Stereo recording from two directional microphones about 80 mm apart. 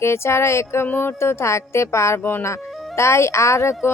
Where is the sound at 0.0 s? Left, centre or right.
Left.